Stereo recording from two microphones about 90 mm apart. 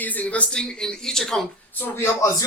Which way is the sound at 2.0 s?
35° left (ahead or behind).